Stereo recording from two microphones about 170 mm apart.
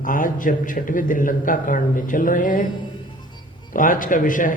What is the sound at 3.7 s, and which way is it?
Speech, 55° left (ahead or behind).